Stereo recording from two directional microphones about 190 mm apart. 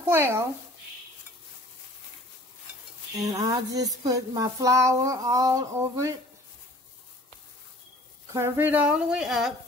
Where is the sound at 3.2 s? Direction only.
20° right (ahead or behind).